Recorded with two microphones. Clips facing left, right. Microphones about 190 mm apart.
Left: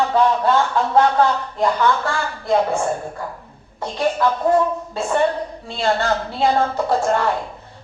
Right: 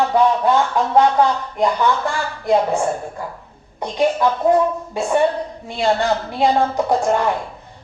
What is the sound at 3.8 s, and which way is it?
Speech, 15° right (ahead or behind).